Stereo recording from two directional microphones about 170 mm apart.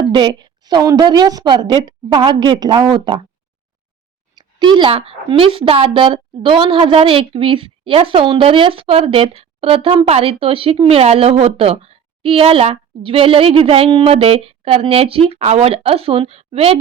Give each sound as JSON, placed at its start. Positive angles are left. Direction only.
{"t": 0.0, "sound": "a woman's voice", "side_deg": -30}
{"t": 4.4, "sound": "a woman's voice", "side_deg": -30}